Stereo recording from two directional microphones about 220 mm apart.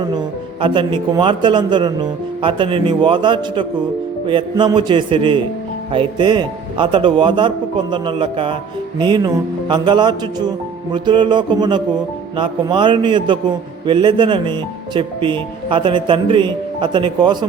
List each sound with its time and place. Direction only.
0.6 s speech: 20° right (ahead or behind)